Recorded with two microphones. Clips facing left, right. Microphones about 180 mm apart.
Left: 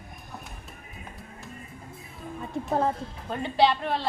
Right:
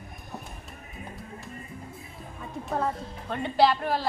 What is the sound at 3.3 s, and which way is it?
Speech, centre (ahead or behind).